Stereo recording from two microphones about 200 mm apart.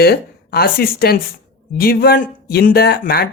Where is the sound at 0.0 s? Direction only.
50° left (ahead or behind).